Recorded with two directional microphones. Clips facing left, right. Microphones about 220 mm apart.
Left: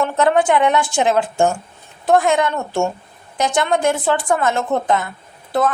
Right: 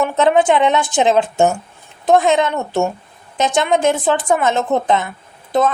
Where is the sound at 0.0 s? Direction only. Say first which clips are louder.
Right 2 dB; 20° right (ahead or behind).